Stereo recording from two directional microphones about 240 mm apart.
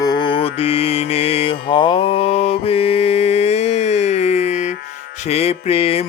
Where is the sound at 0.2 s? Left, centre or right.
Left.